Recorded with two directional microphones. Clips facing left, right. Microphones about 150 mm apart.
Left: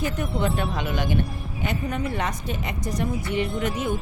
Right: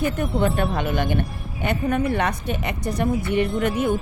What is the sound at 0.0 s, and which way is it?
A woman's voice, 55° right (ahead or behind).